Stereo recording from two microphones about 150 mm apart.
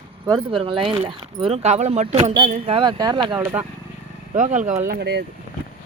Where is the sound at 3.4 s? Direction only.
15° right (ahead or behind).